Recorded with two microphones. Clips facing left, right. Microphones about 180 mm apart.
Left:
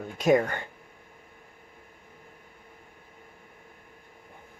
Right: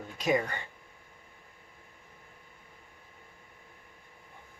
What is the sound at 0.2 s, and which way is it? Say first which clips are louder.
Speech: left 6 dB; 50° left (ahead or behind).